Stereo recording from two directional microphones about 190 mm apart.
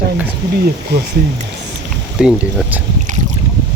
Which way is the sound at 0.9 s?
60° right (ahead or behind).